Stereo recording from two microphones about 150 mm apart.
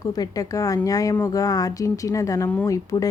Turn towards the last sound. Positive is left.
turn(degrees=20)  # may be behind; listen again after turning